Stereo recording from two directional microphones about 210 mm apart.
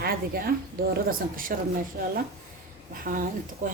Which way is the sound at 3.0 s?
40° right (ahead or behind).